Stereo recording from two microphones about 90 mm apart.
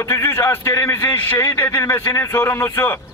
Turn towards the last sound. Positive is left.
turn(degrees=25)  # may be behind; listen again after turning